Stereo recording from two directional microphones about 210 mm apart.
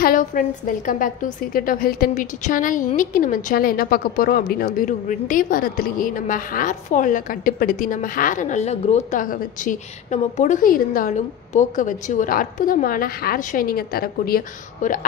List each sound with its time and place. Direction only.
0.0 s a woman's voice: 40° left (ahead or behind)